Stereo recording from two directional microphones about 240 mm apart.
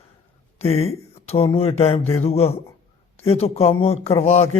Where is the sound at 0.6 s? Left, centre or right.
Left.